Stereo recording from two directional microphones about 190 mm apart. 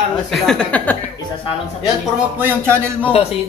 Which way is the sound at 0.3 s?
Centre (ahead or behind).